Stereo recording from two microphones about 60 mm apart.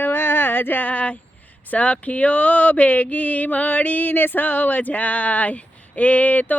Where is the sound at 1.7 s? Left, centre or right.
Left.